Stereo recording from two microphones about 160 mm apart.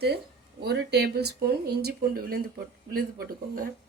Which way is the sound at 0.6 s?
90° right.